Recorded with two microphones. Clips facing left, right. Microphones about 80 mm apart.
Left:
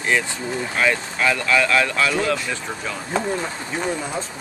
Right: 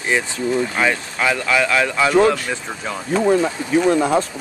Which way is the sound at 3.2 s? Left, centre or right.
Right.